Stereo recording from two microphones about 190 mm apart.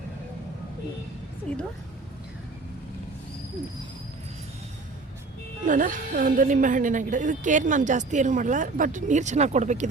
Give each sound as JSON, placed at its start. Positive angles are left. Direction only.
{"t": 1.5, "sound": "a woman's voice", "side_deg": 5}
{"t": 5.6, "sound": "a woman's voice", "side_deg": -45}